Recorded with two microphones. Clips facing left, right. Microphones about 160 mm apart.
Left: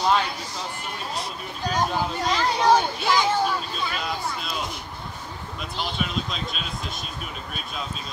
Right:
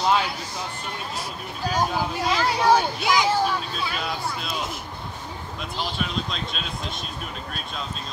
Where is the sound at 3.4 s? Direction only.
Centre (ahead or behind).